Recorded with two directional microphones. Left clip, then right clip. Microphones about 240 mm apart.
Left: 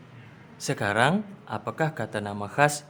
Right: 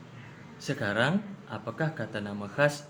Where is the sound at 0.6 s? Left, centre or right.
Left.